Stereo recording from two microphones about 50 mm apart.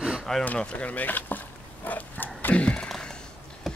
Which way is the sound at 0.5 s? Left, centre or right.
Left.